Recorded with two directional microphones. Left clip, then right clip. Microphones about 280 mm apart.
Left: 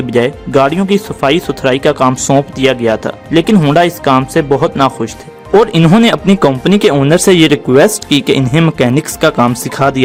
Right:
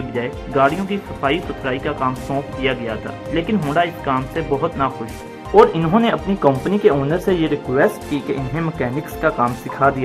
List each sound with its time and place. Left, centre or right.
0.1 s speech: left